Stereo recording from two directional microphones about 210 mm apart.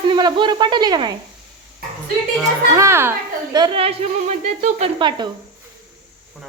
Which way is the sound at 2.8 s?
10° right (ahead or behind).